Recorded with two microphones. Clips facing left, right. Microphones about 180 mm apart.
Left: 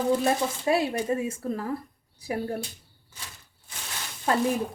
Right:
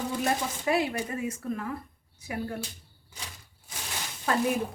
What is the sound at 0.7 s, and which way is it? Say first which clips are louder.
A woman's voice: left 3 dB; 30° left (ahead or behind).